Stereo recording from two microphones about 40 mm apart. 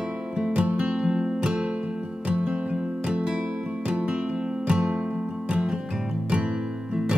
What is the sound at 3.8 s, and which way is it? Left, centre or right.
Music, right.